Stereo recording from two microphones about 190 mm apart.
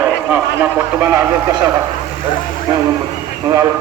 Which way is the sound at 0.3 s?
10° right (ahead or behind).